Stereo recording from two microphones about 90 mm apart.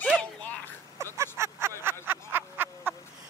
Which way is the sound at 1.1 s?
30° right (ahead or behind).